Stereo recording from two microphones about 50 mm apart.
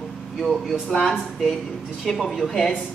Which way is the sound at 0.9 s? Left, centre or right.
Centre.